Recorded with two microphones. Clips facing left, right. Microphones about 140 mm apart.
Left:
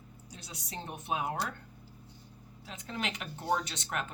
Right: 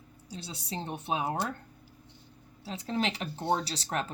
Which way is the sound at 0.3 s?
30° right (ahead or behind).